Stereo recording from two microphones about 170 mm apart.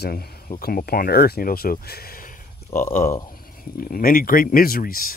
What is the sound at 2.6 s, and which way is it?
Speech, 15° left (ahead or behind).